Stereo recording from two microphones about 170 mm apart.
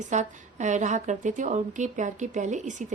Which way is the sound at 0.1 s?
45° right (ahead or behind).